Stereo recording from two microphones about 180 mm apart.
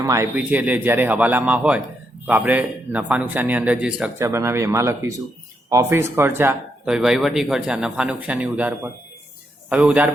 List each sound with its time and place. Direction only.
0.0 s speech: 15° right (ahead or behind)